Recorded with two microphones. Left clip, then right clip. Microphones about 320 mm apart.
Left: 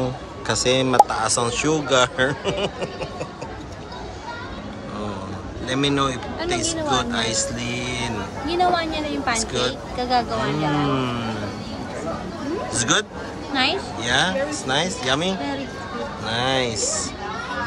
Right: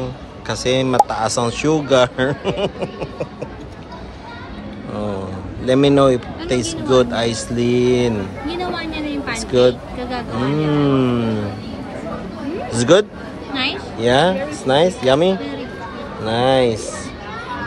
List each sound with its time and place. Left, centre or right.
0.5 s speech: centre
5.7 s speech: centre
8.5 s a woman's voice: left
9.4 s speech: centre
9.9 s speech: left
10.5 s speech: centre
12.7 s speech: centre
14.0 s speech: centre